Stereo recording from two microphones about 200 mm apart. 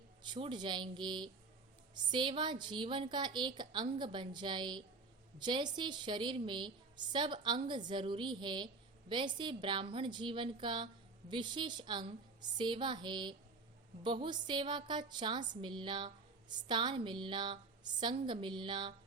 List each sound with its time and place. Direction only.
0.2 s a woman's voice: 25° right (ahead or behind)